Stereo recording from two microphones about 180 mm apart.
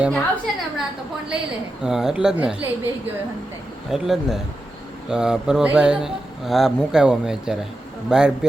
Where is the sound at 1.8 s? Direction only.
5° right (ahead or behind).